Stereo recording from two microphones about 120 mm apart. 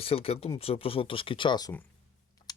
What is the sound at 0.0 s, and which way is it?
Speech, 55° left (ahead or behind).